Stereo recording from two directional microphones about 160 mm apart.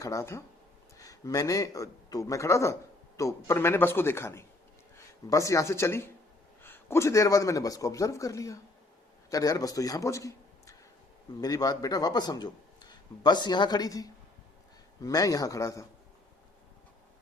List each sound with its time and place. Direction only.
0.0 s a man's voice: 20° left (ahead or behind)